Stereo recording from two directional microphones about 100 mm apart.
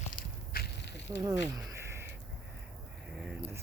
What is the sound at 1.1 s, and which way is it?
Speech, 35° right (ahead or behind).